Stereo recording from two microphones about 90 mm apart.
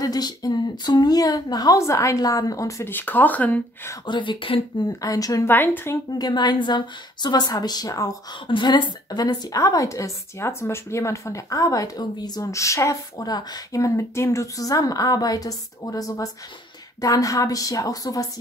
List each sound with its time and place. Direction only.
0.0 s a woman's voice: 45° left (ahead or behind)
2.9 s speech: 20° left (ahead or behind)
4.0 s speech: 60° left (ahead or behind)
4.8 s a woman's voice: 40° left (ahead or behind)
5.5 s speech: 20° left (ahead or behind)
6.1 s a woman's voice: 50° left (ahead or behind)
8.5 s a woman's voice: 55° left (ahead or behind); by 12.9 s 35° left (ahead or behind)
13.2 s a woman's voice: 50° left (ahead or behind)